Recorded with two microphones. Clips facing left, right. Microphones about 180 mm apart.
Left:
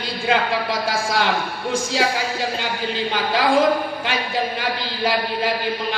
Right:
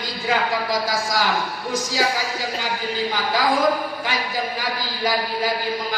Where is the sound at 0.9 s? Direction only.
25° left (ahead or behind).